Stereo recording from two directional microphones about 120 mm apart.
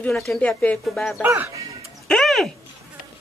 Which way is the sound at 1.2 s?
15° right (ahead or behind).